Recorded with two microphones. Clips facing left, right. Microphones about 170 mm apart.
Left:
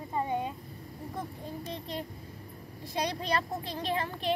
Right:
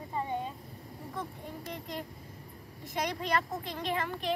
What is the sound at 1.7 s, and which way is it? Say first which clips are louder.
Speech: left 2 dB; 30° left (ahead or behind).